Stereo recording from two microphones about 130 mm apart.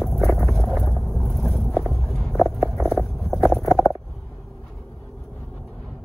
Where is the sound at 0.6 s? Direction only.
Centre (ahead or behind).